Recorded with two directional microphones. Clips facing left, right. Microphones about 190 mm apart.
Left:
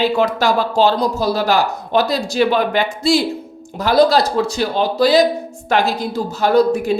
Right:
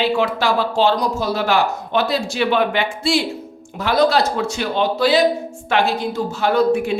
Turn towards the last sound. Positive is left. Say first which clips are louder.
# left 2 dB
turn(degrees=40)  # may be behind; listen again after turning